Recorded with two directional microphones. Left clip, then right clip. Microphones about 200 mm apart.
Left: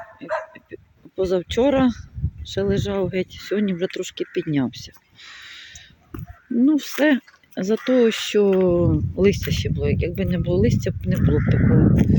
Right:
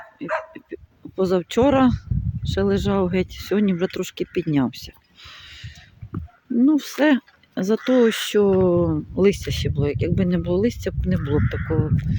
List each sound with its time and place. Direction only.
0.2 s speech: 5° right (ahead or behind)
0.5 s a sound: 5° right (ahead or behind)
2.6 s speech: 10° right (ahead or behind)
5.2 s a sound: 5° right (ahead or behind)
6.6 s speech: 5° right (ahead or behind)
11.5 s speech: 60° right (ahead or behind)